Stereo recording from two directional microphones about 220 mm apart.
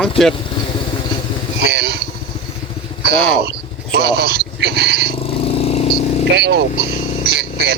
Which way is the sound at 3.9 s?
45° right (ahead or behind).